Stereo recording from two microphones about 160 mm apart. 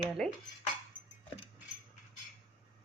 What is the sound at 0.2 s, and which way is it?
Speech, centre (ahead or behind).